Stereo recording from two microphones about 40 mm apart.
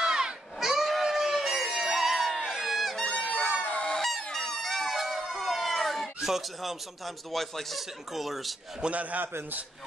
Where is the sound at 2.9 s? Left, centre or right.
Centre.